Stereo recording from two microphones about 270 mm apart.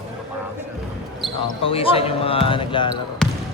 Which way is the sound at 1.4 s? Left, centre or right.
Centre.